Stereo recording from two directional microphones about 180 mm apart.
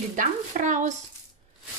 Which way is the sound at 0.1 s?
45° right (ahead or behind).